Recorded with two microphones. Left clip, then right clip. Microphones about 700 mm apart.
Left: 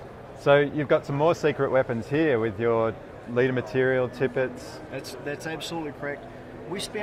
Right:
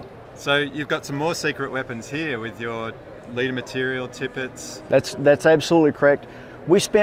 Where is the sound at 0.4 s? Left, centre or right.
Left.